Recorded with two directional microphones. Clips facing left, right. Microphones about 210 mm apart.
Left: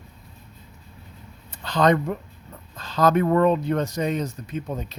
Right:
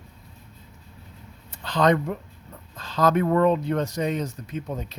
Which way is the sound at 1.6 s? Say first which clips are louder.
Left 1 dB; 45° left (ahead or behind).